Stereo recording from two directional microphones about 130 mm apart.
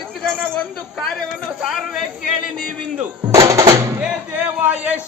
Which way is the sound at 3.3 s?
25° right (ahead or behind).